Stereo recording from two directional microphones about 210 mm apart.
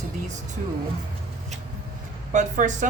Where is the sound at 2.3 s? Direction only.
35° right (ahead or behind).